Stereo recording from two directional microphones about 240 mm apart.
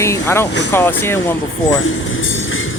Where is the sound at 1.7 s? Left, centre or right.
Left.